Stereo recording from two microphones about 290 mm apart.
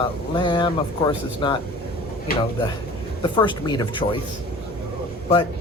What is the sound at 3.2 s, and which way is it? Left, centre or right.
Speech, centre.